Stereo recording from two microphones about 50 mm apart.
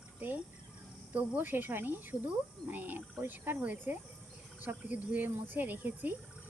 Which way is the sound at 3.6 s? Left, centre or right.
Right.